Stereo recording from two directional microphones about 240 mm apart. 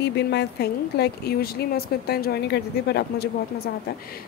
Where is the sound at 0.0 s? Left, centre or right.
Left.